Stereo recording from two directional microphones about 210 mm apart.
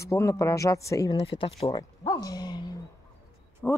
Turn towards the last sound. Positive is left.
turn(degrees=10)  # may be behind; listen again after turning